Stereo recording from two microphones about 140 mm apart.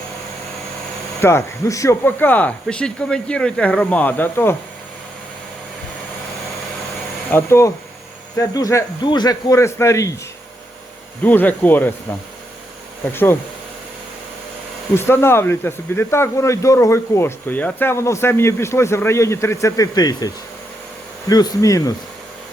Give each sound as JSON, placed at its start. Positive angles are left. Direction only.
{"t": 1.2, "sound": "speech", "side_deg": 20}
{"t": 7.3, "sound": "speech", "side_deg": 15}
{"t": 11.2, "sound": "speech", "side_deg": 10}
{"t": 13.1, "sound": "speech", "side_deg": 15}
{"t": 14.9, "sound": "speech", "side_deg": 15}